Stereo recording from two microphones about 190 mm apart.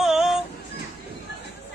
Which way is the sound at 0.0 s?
Centre (ahead or behind).